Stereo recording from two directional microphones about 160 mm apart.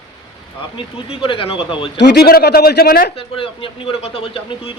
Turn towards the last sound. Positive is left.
turn(degrees=35)  # may be behind; listen again after turning